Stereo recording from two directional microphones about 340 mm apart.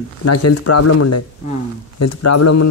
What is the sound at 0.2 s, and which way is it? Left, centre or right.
Speech, left.